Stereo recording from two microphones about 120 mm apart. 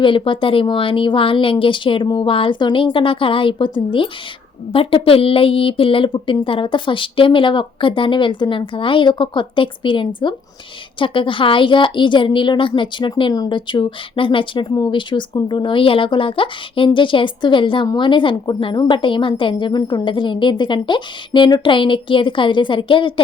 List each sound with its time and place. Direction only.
0.0 s a woman's voice: 45° left (ahead or behind)